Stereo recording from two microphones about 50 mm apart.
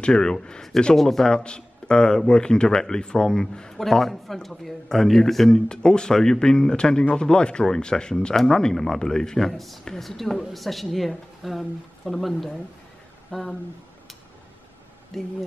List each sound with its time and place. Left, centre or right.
0.0 s a man's voice: centre
5.7 s a man's voice: centre
15.1 s a man's voice: centre